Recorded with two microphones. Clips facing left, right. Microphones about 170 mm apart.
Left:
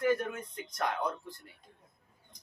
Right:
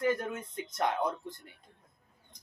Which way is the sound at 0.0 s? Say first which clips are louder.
Left 1 dB; 25° right (ahead or behind).